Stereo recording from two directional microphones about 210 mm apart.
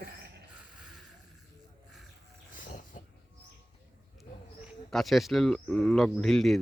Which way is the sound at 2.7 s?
40° left (ahead or behind).